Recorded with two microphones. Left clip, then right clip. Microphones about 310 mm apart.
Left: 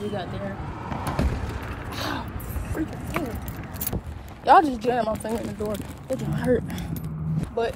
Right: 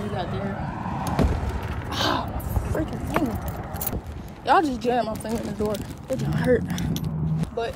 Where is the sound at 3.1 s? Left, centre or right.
Right.